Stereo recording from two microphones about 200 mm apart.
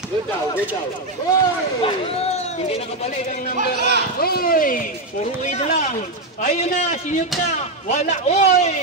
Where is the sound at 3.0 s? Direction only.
45° left (ahead or behind).